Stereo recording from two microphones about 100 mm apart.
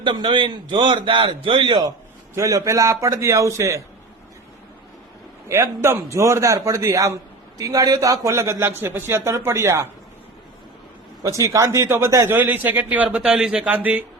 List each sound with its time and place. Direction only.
0.0 s a man's voice: 50° right (ahead or behind)
2.3 s a man's voice: 35° right (ahead or behind)
5.5 s a man's voice: 25° right (ahead or behind)
11.2 s speech: 30° right (ahead or behind); by 14.0 s 15° right (ahead or behind)